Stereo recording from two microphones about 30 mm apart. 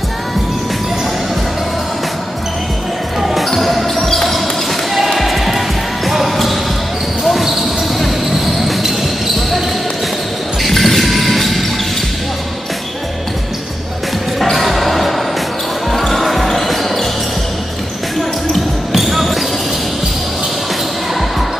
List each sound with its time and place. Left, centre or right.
3.4 s basketball bounce: centre
4.9 s basketball bounce: centre
6.0 s music: centre
7.2 s basketball bounce: centre
10.6 s music: centre
14.4 s basketball bounce: centre
18.9 s basketball bounce: centre